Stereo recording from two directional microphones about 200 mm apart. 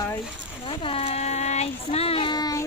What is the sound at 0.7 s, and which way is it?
Child singing, 30° left (ahead or behind).